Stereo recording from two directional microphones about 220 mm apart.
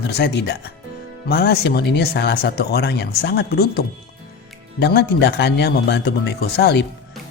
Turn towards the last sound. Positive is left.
turn(degrees=50)  # may be behind; listen again after turning